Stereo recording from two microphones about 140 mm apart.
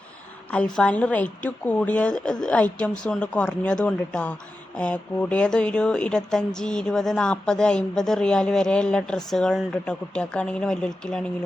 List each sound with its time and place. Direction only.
0.5 s a woman's voice: 10° left (ahead or behind)